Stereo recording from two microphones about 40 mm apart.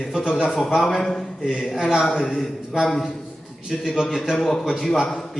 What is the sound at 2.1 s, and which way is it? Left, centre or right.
Speech, centre.